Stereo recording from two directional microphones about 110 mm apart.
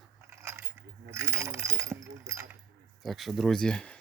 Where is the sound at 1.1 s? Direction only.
25° right (ahead or behind).